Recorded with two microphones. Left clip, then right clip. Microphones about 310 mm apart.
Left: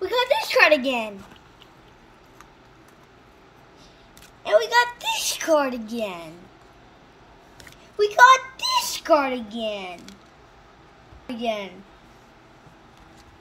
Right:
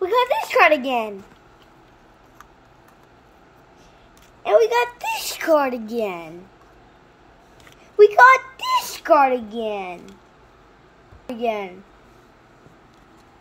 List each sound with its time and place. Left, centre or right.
0.0 s a sound: centre
4.6 s a woman's voice: centre
8.2 s a child's voice: centre
11.2 s a woman's voice: centre